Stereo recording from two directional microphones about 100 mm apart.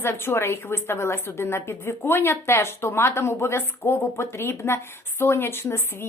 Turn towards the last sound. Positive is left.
turn(degrees=25)  # may be behind; listen again after turning